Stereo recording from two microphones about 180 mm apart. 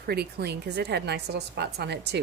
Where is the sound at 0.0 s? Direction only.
60° right (ahead or behind).